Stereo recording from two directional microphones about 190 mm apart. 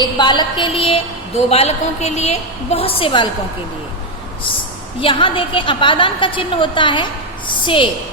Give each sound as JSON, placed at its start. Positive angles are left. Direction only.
{"t": 0.0, "sound": "a woman's voice", "side_deg": 25}
{"t": 4.9, "sound": "a woman's voice", "side_deg": 30}